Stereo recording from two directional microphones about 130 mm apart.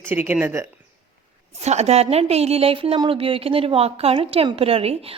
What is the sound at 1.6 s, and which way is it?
A woman's voice, 55° right (ahead or behind).